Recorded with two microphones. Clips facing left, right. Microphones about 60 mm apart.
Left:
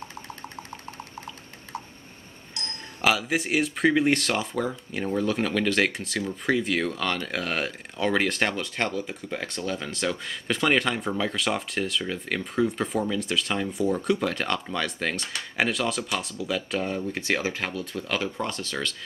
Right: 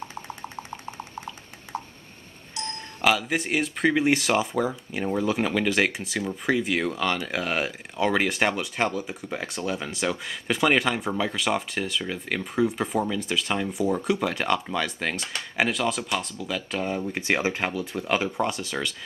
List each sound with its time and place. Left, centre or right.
0.1 s a sound: centre
2.5 s speech: centre
17.0 s speech: centre